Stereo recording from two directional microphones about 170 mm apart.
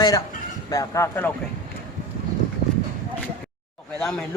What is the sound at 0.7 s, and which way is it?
Speech, 20° left (ahead or behind).